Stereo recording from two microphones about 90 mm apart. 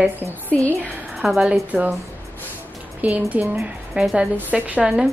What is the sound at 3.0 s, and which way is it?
Speech, 15° right (ahead or behind).